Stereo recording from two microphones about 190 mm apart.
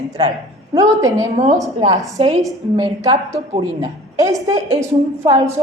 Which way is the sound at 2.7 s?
20° right (ahead or behind).